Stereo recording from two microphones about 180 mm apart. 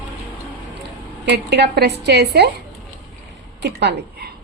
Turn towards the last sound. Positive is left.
turn(degrees=-70)  # may be behind; listen again after turning